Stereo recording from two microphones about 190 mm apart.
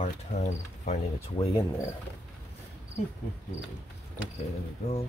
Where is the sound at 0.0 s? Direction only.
40° left (ahead or behind).